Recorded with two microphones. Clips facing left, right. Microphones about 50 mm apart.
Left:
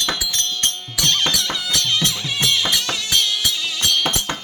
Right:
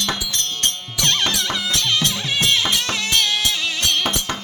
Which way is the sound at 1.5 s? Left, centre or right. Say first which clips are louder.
Right 1 dB; right.